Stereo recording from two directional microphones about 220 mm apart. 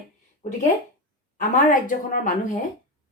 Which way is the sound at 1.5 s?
35° left (ahead or behind).